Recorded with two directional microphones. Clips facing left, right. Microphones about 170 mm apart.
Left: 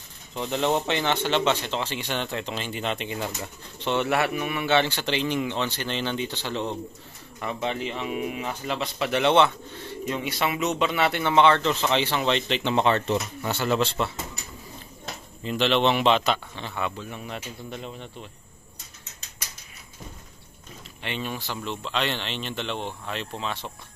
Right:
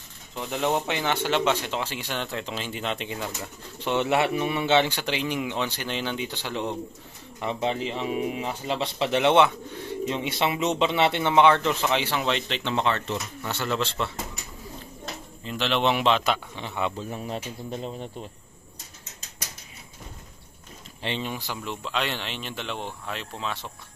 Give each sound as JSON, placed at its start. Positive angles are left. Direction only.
{"t": 0.3, "sound": "speech", "side_deg": -5}
{"t": 3.8, "sound": "a man's voice", "side_deg": -15}
{"t": 7.6, "sound": "a man's voice", "side_deg": -30}
{"t": 12.7, "sound": "speech", "side_deg": 20}
{"t": 13.5, "sound": "speech", "side_deg": 10}
{"t": 15.4, "sound": "speech", "side_deg": 0}
{"t": 16.5, "sound": "a man's voice", "side_deg": -15}
{"t": 16.9, "sound": "speech", "side_deg": -35}
{"t": 21.0, "sound": "speech", "side_deg": -30}
{"t": 21.3, "sound": "a man's voice", "side_deg": -15}